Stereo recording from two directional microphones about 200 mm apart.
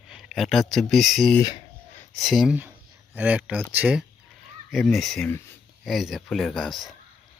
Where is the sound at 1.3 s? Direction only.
20° left (ahead or behind).